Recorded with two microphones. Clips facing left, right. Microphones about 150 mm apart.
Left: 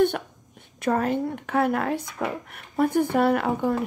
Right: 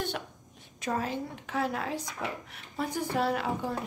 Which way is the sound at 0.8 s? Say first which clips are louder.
Left 9 dB; 60° left (ahead or behind).